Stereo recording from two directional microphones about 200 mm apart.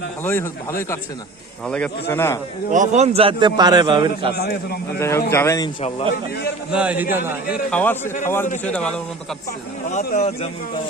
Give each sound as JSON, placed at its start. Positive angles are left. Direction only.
{"t": 0.2, "sound": "speech", "side_deg": 10}
{"t": 2.7, "sound": "a man's voice", "side_deg": -35}
{"t": 4.4, "sound": "a man's voice", "side_deg": 55}
{"t": 4.9, "sound": "speech", "side_deg": 15}
{"t": 6.7, "sound": "a man's voice", "side_deg": -5}
{"t": 7.7, "sound": "speech", "side_deg": 10}
{"t": 9.9, "sound": "speech", "side_deg": 40}